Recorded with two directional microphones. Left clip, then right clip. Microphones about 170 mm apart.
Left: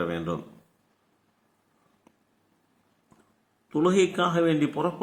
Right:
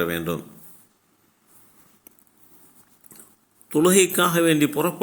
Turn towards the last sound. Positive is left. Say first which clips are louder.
# right 4 dB
turn(degrees=-25)  # may be behind; listen again after turning